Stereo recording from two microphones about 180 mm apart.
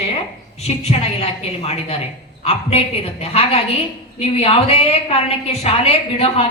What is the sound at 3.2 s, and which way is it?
A woman's voice, 35° left (ahead or behind).